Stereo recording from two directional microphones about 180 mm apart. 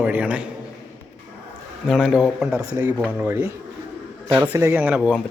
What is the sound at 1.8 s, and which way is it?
Speech, centre (ahead or behind).